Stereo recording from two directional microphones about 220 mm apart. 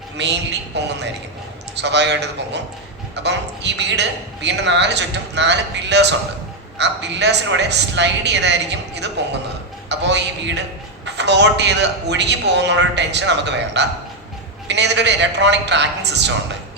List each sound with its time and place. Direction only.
0.2 s a man's voice: 50° right (ahead or behind)